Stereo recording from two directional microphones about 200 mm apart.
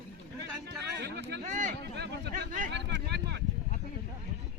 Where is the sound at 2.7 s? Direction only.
60° right (ahead or behind).